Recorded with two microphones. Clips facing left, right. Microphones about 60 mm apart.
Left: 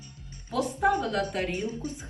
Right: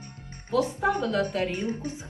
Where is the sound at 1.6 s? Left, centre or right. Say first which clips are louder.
Right 2 dB; right.